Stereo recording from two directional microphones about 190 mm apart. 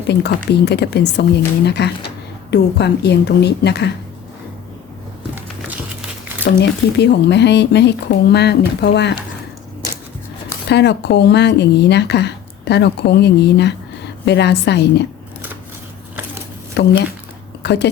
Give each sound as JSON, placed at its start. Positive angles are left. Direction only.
{"t": 0.1, "sound": "speech", "side_deg": 60}
{"t": 6.6, "sound": "speech", "side_deg": 60}
{"t": 10.7, "sound": "speech", "side_deg": 65}
{"t": 16.8, "sound": "speech", "side_deg": 60}
{"t": 17.6, "sound": "a sound", "side_deg": 65}